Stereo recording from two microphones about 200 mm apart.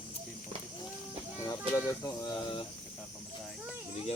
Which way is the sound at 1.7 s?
20° left (ahead or behind).